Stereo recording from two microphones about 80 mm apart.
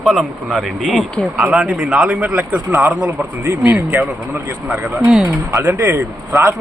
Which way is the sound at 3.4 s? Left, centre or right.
Right.